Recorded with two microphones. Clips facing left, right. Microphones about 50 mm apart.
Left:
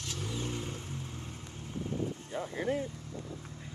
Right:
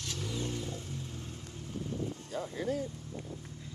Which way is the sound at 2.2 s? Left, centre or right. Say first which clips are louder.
Left 1 dB; left.